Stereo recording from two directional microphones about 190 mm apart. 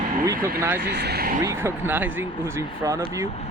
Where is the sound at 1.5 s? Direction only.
10° right (ahead or behind).